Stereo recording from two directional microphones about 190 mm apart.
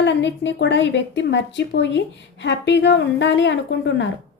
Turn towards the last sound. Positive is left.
turn(degrees=70)  # may be behind; listen again after turning